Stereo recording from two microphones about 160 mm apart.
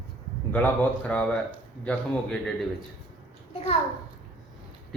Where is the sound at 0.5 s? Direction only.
10° left (ahead or behind).